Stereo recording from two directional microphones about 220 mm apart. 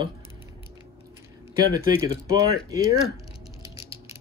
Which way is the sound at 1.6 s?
15° right (ahead or behind).